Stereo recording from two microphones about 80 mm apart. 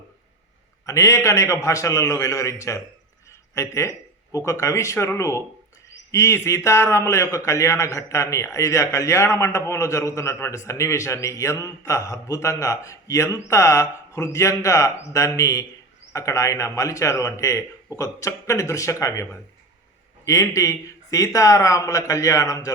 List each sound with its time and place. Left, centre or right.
0.9 s a man's voice: left